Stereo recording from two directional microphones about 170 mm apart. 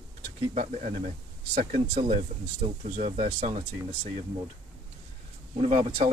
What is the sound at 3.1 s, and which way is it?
Speech, 40° right (ahead or behind).